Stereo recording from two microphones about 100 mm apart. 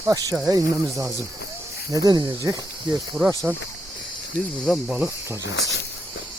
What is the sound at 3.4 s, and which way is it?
Speech, 15° right (ahead or behind).